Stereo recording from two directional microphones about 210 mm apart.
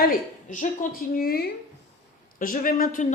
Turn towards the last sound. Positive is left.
turn(degrees=40)  # may be behind; listen again after turning